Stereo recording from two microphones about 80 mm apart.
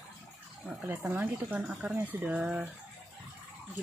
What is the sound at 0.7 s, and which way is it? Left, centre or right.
Speech, centre.